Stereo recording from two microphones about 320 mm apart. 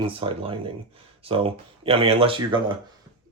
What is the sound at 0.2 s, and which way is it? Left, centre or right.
Speech, centre.